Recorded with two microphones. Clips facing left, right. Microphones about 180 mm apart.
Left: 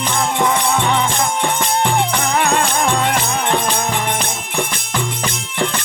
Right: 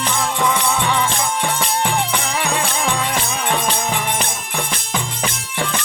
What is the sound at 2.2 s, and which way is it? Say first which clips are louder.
Music: left 5 dB; 55° left (ahead or behind).